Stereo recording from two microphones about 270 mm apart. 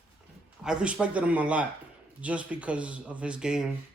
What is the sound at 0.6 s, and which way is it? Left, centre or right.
A man's voice, centre.